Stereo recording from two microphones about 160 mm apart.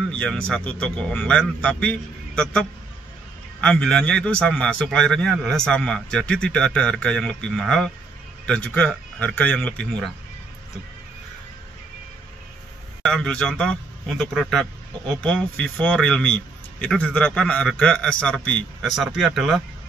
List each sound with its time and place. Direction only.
0.1 s a man's voice: 5° left (ahead or behind)
3.6 s a man's voice: 5° left (ahead or behind)
13.0 s a man's voice: 5° left (ahead or behind)